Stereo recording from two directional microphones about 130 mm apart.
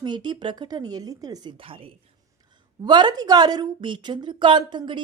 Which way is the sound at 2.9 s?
35° right (ahead or behind).